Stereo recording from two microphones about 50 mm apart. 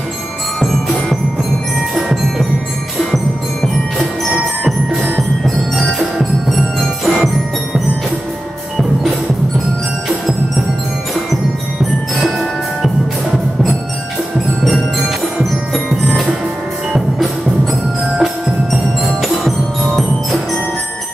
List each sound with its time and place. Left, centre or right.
0.6 s music: centre
2.0 s tubular bells: centre
6.1 s music: centre
17.2 s music: centre